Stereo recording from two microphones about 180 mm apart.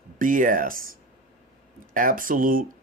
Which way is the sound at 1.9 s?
50° right (ahead or behind).